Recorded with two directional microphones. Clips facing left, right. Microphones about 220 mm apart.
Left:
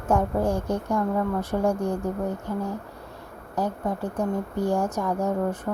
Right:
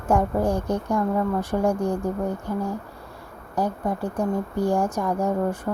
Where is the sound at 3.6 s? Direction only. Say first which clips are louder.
Right 2 dB; 15° right (ahead or behind).